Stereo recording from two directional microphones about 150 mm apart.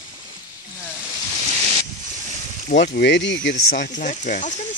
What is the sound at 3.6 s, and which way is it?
Speech, 55° left (ahead or behind).